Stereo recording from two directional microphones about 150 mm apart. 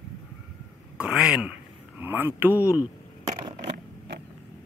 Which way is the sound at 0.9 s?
5° right (ahead or behind).